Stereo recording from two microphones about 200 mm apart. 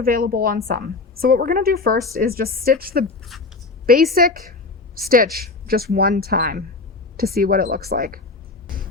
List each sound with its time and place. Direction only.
0.0 s a woman's voice: 50° right (ahead or behind)
8.6 s music: 45° right (ahead or behind)